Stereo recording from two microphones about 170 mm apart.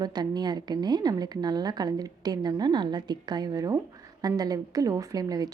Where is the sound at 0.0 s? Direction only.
25° right (ahead or behind).